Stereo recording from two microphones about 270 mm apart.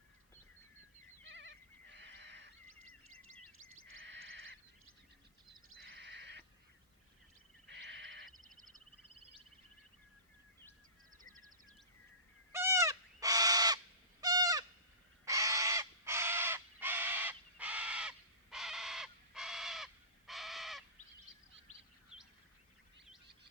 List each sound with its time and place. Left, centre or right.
1.3 s goat: right
3.8 s a sound: right
5.6 s crow: right
7.7 s a sound: right
11.2 s music: right
12.5 s bird: centre
14.2 s goose: centre
15.2 s crow: centre